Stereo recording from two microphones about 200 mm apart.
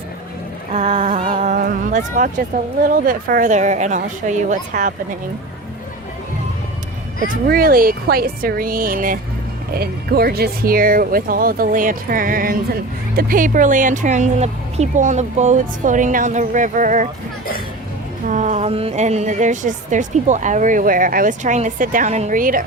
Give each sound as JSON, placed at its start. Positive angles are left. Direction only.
{"t": 0.7, "sound": "a sound", "side_deg": -35}
{"t": 1.6, "sound": "a woman's voice", "side_deg": -40}
{"t": 7.2, "sound": "a woman's voice", "side_deg": -45}
{"t": 18.3, "sound": "a woman's voice", "side_deg": -35}